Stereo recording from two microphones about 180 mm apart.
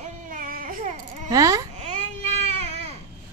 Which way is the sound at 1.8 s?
35° right (ahead or behind).